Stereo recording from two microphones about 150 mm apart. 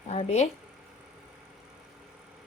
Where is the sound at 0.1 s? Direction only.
45° left (ahead or behind).